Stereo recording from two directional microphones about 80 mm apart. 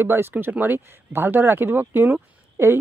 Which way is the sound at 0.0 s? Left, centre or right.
Right.